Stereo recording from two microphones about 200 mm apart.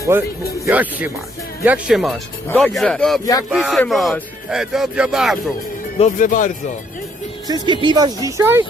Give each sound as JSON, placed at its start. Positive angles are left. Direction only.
{"t": 0.6, "sound": "speech", "side_deg": -5}
{"t": 6.0, "sound": "speech", "side_deg": 40}
{"t": 7.4, "sound": "speech", "side_deg": -20}